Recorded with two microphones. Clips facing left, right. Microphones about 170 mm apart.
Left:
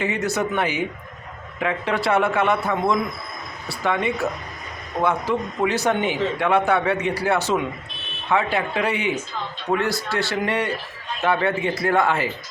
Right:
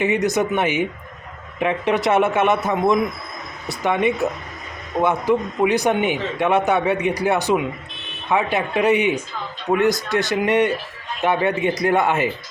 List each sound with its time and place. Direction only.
0.0 s a man's voice: 20° right (ahead or behind)